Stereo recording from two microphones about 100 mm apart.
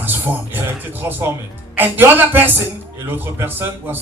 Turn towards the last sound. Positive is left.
turn(degrees=-20)  # may be behind; listen again after turning